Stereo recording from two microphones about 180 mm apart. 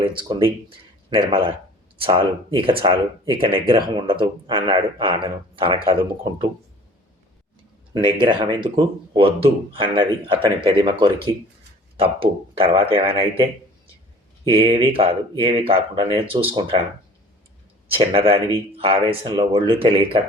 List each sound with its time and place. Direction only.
0.0 s speech: 25° right (ahead or behind)
7.9 s speech: 25° right (ahead or behind)
18.1 s speech: 30° right (ahead or behind)